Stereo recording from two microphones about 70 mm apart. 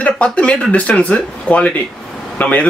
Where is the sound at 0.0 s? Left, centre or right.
Centre.